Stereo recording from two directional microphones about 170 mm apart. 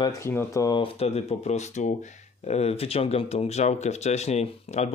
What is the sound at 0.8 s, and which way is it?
Speech, 35° left (ahead or behind).